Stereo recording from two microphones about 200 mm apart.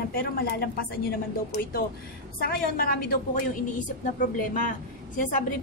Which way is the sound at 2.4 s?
45° left (ahead or behind).